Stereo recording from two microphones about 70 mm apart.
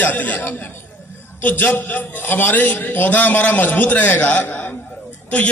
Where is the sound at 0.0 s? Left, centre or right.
Left.